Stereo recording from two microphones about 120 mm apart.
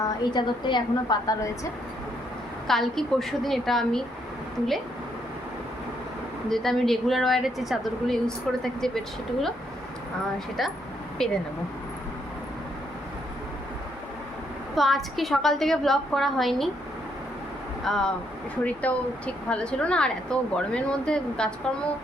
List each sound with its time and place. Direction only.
0.0 s a woman's voice: 35° left (ahead or behind)
2.6 s a woman's voice: centre (ahead or behind)
6.5 s a woman's voice: centre (ahead or behind)
10.6 s a woman's voice: centre (ahead or behind)
14.8 s a woman's voice: centre (ahead or behind)
17.8 s a woman's voice: 5° left (ahead or behind)